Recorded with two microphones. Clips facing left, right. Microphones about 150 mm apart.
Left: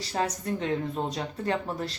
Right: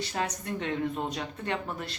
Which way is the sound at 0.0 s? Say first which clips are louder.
Left 3 dB; 35° left (ahead or behind).